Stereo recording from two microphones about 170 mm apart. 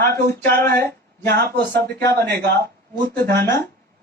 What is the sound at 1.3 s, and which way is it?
Speech, 65° right (ahead or behind).